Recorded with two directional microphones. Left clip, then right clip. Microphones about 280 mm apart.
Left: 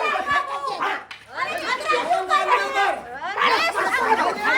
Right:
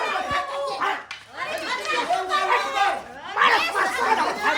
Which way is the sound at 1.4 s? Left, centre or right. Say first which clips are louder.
Left 3 dB; centre.